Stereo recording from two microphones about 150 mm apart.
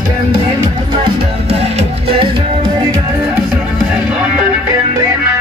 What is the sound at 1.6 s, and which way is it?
Music, 35° right (ahead or behind).